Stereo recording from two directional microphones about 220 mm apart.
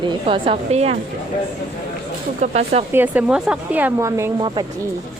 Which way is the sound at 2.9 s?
10° right (ahead or behind).